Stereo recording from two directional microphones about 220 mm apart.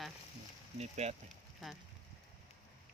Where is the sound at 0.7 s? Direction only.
30° right (ahead or behind).